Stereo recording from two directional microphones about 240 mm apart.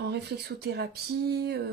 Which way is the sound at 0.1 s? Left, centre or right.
Right.